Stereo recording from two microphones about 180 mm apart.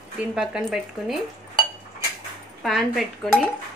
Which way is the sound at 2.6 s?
Centre (ahead or behind).